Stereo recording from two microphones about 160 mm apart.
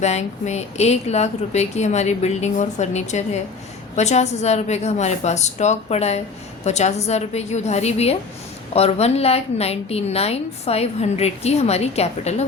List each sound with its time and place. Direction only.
0.0 s a woman's voice: 45° left (ahead or behind)